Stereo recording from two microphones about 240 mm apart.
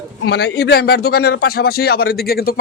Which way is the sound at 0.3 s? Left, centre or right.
Left.